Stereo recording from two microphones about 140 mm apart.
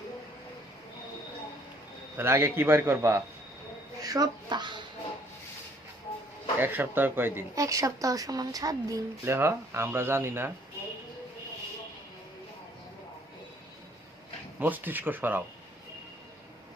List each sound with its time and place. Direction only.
2.1 s a man's voice: 15° right (ahead or behind); by 4.8 s 30° right (ahead or behind)
6.6 s speech: 15° right (ahead or behind)
14.6 s a man's voice: 15° right (ahead or behind)